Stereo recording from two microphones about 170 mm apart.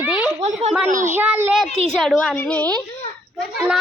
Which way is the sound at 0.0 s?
5° right (ahead or behind).